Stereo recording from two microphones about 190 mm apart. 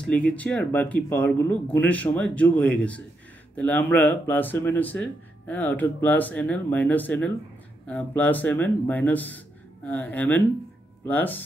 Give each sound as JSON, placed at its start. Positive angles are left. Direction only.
{"t": 0.0, "sound": "speech", "side_deg": 5}